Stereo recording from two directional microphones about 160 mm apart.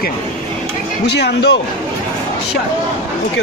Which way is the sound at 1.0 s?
90° left.